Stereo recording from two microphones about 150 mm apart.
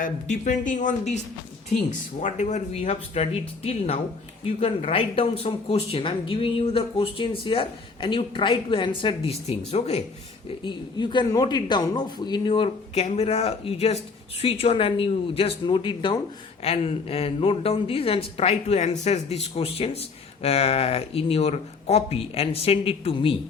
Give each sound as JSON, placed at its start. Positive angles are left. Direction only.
{"t": 0.0, "sound": "a woman's voice", "side_deg": 60}
{"t": 10.6, "sound": "a woman's voice", "side_deg": 30}